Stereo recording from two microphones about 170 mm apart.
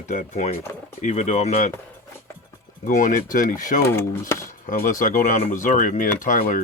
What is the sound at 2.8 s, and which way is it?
Speech, 50° left (ahead or behind).